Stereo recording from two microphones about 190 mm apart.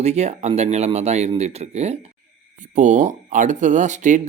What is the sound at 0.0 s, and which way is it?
Speech, 35° right (ahead or behind).